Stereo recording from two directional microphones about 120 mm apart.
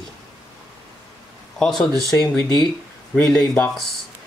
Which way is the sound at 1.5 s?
5° left (ahead or behind).